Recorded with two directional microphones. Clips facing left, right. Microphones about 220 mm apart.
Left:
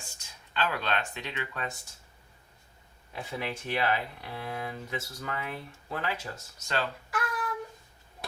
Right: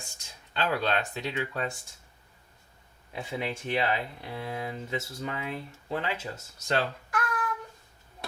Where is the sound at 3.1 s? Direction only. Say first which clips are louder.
Right 2 dB; 25° right (ahead or behind).